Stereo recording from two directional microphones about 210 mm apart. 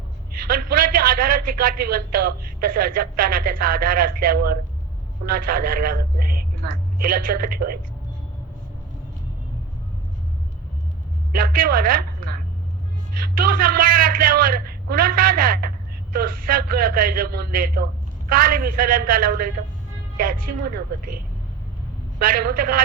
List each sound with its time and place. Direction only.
0.4 s a man's voice: 45° right (ahead or behind)
11.3 s a woman's voice: 45° right (ahead or behind)
22.2 s a man's voice: 45° right (ahead or behind)